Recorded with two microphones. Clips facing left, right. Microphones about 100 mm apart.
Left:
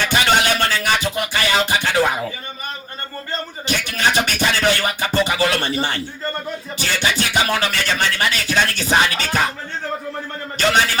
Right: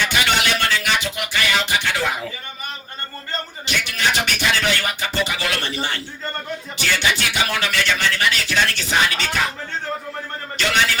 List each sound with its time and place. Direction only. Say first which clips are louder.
0.1 s music: left 3 dB; 40° left (ahead or behind)
3.7 s music: left 2 dB; 40° left (ahead or behind)